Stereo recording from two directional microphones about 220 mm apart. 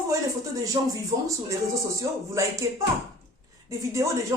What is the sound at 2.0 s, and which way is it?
Speech, 15° right (ahead or behind).